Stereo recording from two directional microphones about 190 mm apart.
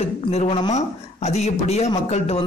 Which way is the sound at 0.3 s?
35° left (ahead or behind).